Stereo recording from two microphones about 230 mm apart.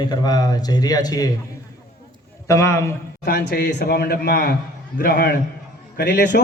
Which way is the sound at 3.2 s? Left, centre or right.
Left.